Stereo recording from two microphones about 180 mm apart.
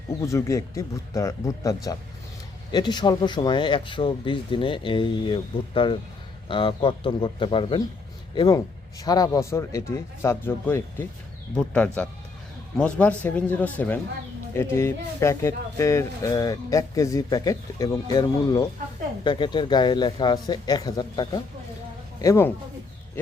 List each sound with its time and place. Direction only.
0.2 s speech: 15° left (ahead or behind)